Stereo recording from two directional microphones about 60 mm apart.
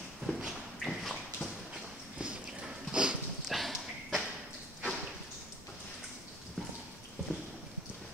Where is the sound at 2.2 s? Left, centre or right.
Centre.